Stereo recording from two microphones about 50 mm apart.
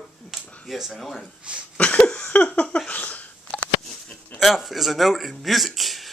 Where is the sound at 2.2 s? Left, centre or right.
Left.